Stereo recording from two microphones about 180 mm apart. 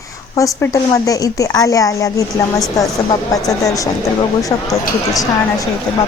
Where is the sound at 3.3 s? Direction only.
20° left (ahead or behind).